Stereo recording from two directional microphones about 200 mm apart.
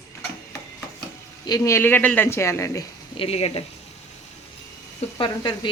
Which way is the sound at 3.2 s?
30° left (ahead or behind).